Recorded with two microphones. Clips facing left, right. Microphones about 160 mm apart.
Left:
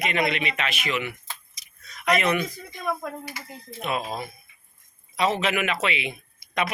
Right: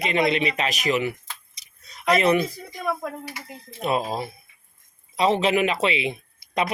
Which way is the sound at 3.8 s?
35° right (ahead or behind).